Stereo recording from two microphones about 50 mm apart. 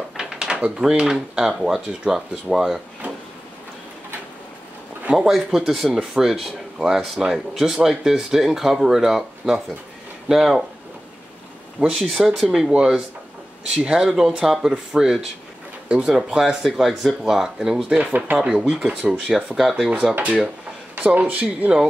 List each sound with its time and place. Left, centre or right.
0.2 s a sound: centre
0.7 s speech: centre
5.1 s speech: centre
11.8 s speech: centre
17.9 s speech: right
18.4 s speech: centre
20.9 s speech: right